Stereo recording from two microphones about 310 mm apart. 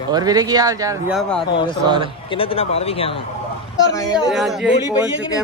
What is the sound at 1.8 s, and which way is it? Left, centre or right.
Speech, centre.